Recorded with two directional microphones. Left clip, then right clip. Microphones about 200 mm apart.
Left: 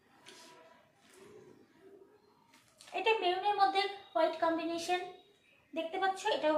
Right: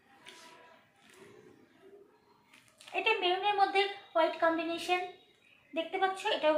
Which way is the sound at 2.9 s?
15° left (ahead or behind).